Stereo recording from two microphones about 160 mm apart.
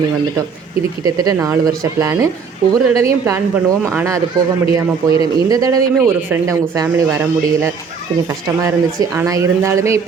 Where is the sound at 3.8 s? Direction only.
15° right (ahead or behind).